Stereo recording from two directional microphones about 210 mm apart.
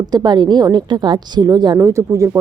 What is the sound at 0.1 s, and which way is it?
Speech, 20° right (ahead or behind).